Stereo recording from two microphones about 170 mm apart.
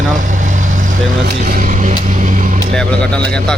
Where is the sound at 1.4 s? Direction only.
50° right (ahead or behind).